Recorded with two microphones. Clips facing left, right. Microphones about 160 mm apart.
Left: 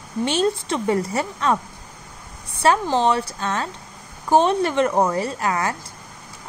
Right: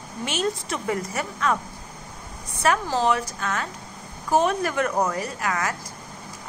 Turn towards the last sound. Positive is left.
turn(degrees=30)  # may be behind; listen again after turning